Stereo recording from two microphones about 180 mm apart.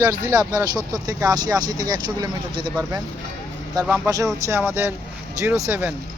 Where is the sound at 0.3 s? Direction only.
20° right (ahead or behind).